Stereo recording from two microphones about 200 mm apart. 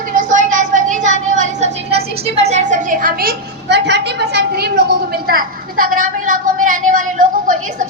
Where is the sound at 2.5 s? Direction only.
40° right (ahead or behind).